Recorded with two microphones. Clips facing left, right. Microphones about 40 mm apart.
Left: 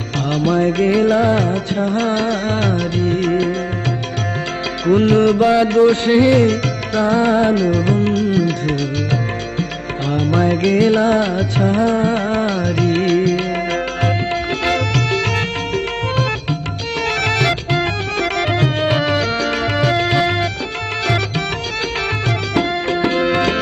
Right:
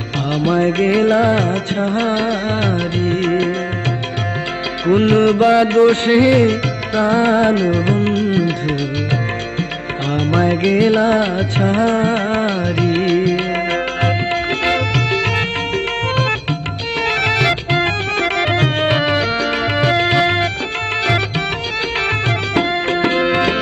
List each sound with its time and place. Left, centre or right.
0.5 s music: right
4.8 s music: right
6.2 s music: right
7.0 s music: right
10.6 s music: right
11.6 s music: right
12.9 s music: centre
13.7 s music: right
17.0 s music: right
17.6 s music: right
18.9 s music: right
23.2 s music: centre